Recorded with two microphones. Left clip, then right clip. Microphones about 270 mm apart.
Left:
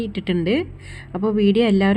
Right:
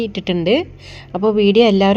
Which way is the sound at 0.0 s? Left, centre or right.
Centre.